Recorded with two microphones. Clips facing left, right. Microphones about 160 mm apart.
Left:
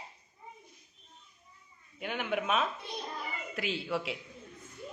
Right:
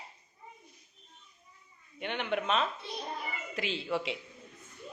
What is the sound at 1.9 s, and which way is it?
Speech, 5° left (ahead or behind).